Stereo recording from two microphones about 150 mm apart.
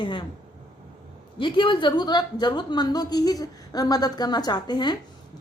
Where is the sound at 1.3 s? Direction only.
35° left (ahead or behind).